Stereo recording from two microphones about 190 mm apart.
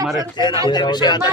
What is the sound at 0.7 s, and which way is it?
Speech, 20° left (ahead or behind).